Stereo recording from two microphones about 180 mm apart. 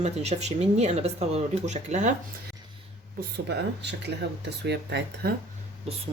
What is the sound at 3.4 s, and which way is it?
Speech, 75° right (ahead or behind).